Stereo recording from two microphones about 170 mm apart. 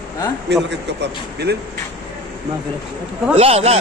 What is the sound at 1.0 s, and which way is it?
Speech, 75° right (ahead or behind).